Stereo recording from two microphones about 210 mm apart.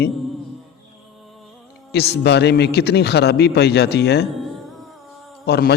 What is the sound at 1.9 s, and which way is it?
Speech, 50° left (ahead or behind).